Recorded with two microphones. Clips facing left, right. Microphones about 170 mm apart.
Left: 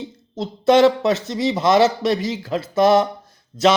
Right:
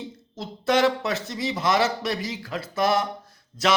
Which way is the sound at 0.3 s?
25° left (ahead or behind).